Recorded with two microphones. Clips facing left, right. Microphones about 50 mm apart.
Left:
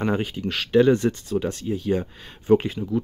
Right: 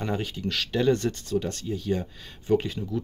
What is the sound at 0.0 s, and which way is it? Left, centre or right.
Speech, left.